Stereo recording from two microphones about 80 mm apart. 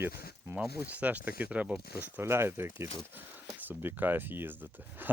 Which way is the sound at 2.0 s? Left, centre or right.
Right.